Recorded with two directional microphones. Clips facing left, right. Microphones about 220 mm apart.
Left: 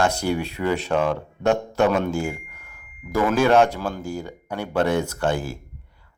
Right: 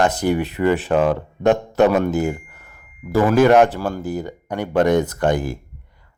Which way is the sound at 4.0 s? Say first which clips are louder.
Right 5 dB; 10° left (ahead or behind).